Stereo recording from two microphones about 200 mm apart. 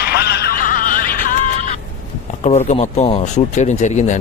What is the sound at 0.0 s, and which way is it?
Music, 55° left (ahead or behind).